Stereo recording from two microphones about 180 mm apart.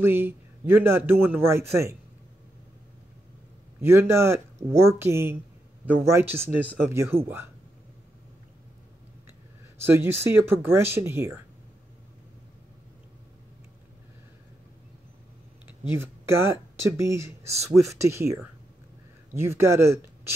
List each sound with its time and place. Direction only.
0.0 s a man's voice: 10° right (ahead or behind)
3.8 s a man's voice: 15° right (ahead or behind)
9.8 s a man's voice: 15° right (ahead or behind)
15.9 s a man's voice: 15° right (ahead or behind)